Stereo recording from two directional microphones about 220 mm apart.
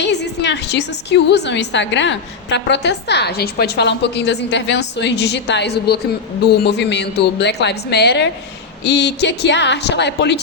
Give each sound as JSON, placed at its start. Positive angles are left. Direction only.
{"t": 0.0, "sound": "a woman's voice", "side_deg": 50}